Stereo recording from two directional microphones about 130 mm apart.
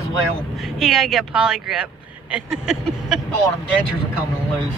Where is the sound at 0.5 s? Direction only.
Centre (ahead or behind).